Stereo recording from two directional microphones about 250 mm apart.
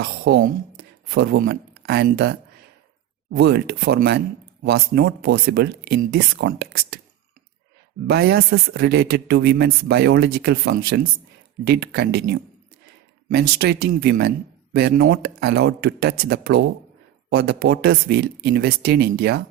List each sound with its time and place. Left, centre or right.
0.0 s a woman's voice: right
8.0 s speech: right
13.2 s speech: right